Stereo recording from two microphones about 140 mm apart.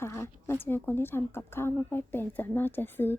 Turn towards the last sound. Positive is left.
turn(degrees=15)  # may be behind; listen again after turning